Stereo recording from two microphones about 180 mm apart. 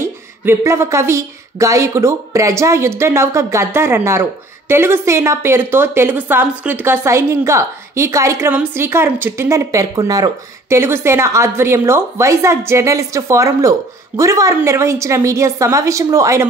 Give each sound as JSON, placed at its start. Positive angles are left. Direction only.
{"t": 0.0, "sound": "speech", "side_deg": -15}